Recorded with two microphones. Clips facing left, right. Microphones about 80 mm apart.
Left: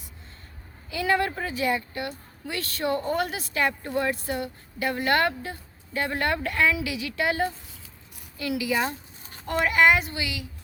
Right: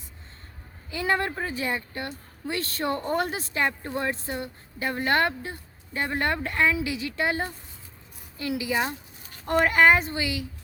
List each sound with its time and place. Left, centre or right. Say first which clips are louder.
0.9 s speech: left 2 dB; right
9.5 s speech: right 1 dB; right